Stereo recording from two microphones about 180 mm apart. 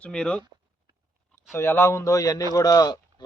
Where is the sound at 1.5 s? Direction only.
10° left (ahead or behind).